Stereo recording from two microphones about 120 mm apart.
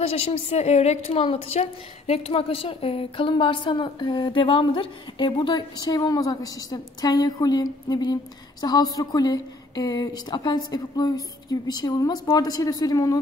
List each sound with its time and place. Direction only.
0.0 s a woman's voice: 50° left (ahead or behind)
5.5 s a woman's voice: 35° left (ahead or behind)